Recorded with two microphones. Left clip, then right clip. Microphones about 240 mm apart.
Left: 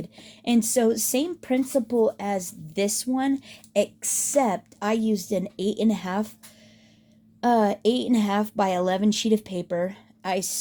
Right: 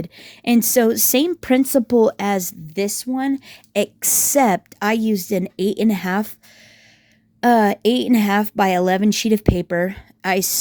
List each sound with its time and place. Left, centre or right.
0.0 s a woman's voice: right
7.4 s a woman's voice: right